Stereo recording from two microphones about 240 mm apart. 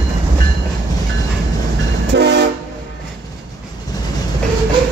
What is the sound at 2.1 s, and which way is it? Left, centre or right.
Train, right.